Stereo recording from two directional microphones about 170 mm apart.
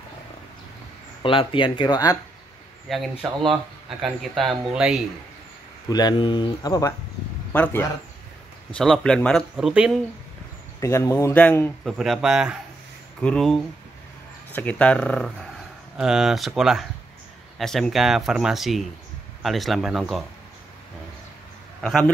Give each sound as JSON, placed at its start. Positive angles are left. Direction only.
{"t": 1.2, "sound": "speech", "side_deg": 30}
{"t": 2.9, "sound": "speech", "side_deg": 0}
{"t": 5.9, "sound": "speech", "side_deg": 25}
{"t": 7.5, "sound": "a man's voice", "side_deg": 10}
{"t": 10.8, "sound": "a man's voice", "side_deg": 20}
{"t": 11.8, "sound": "a man's voice", "side_deg": 0}
{"t": 21.8, "sound": "speech", "side_deg": 5}